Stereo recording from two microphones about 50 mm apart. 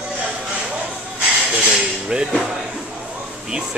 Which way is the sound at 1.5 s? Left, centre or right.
Centre.